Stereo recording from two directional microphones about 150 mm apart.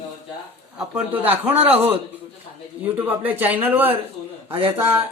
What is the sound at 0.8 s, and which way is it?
Speech, 10° right (ahead or behind).